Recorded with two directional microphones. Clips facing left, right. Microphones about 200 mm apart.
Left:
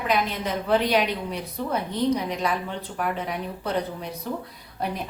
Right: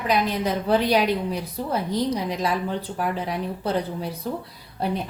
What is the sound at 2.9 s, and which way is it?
Speech, 30° right (ahead or behind).